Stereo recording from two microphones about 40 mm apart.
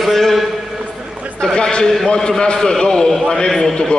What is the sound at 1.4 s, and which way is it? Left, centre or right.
A man's voice, left.